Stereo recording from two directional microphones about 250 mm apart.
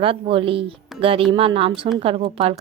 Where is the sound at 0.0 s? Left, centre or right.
Right.